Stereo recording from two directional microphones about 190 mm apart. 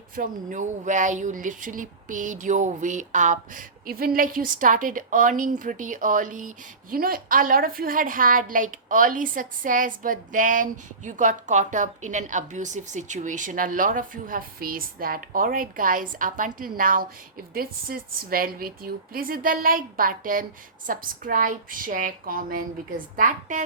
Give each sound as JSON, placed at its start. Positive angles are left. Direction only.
{"t": 0.2, "sound": "a woman's voice", "side_deg": -40}